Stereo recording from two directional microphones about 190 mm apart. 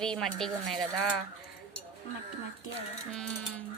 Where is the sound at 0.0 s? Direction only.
5° left (ahead or behind).